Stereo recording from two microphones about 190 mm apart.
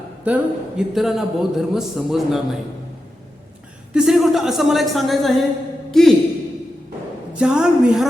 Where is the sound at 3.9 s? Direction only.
Centre (ahead or behind).